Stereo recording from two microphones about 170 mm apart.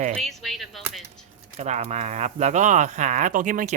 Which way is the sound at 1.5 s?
40° right (ahead or behind).